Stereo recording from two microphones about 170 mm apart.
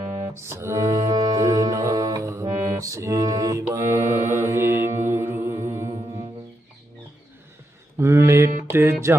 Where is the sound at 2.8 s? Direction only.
20° right (ahead or behind).